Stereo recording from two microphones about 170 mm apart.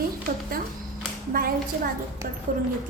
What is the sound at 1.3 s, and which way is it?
Speech, 60° right (ahead or behind).